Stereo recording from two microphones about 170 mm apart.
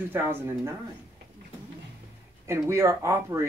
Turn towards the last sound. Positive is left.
turn(degrees=-15)  # may be behind; listen again after turning